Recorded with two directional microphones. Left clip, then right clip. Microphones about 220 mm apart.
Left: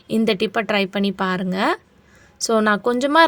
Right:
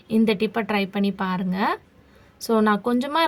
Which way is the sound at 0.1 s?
35° left (ahead or behind).